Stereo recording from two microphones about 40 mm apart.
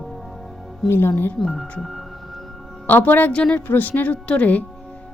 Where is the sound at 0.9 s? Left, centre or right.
Left.